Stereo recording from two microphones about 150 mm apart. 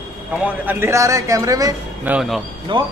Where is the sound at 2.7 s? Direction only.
35° right (ahead or behind).